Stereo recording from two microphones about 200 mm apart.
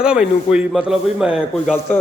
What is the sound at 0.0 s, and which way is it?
A man's voice, 5° right (ahead or behind).